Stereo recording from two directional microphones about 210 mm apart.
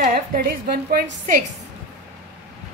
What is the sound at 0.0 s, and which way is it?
A woman's voice, 40° right (ahead or behind).